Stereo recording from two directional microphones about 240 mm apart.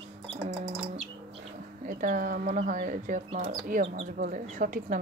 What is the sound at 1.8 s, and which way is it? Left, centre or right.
Speech, right.